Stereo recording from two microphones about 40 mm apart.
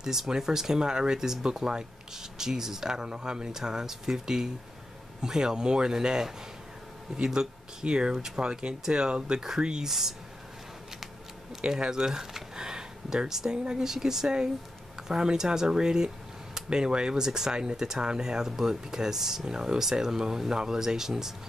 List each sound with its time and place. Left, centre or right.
0.0 s speech: centre
9.8 s speech: centre
11.6 s speech: centre